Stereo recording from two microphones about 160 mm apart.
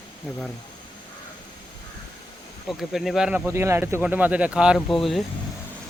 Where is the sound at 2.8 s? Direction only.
Centre (ahead or behind).